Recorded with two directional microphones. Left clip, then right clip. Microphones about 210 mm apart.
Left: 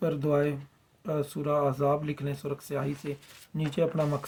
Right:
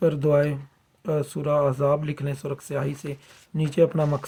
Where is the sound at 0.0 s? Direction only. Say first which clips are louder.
Right 6 dB; 50° right (ahead or behind).